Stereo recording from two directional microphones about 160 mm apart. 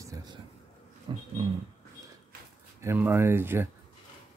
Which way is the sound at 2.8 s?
15° right (ahead or behind).